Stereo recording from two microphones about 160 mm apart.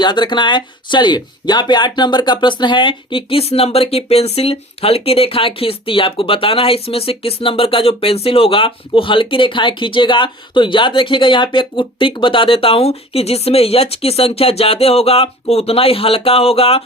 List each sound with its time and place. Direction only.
0.0 s speech: 30° left (ahead or behind)